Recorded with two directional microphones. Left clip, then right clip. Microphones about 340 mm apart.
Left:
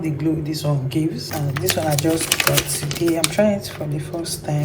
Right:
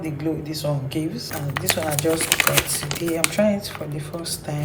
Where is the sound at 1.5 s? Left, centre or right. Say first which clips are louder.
Left 2 dB; centre.